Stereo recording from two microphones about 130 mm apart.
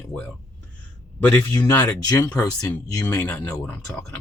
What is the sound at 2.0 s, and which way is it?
Speech, 30° left (ahead or behind).